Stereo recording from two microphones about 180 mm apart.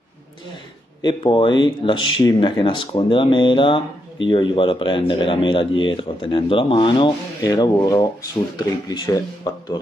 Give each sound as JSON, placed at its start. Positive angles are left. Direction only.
{"t": 1.0, "sound": "speech", "side_deg": 25}